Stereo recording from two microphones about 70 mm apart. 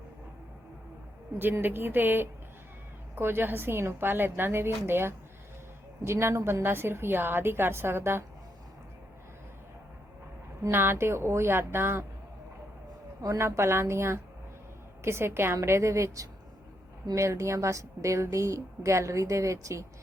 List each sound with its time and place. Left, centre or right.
1.6 s a woman's voice: right
10.7 s a woman's voice: right
13.4 s a woman's voice: right